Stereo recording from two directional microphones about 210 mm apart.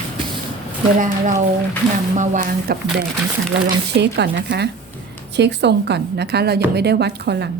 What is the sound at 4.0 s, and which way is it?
A woman's voice, 55° right (ahead or behind).